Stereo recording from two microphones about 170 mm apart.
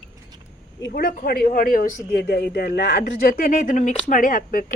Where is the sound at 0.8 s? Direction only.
70° left (ahead or behind).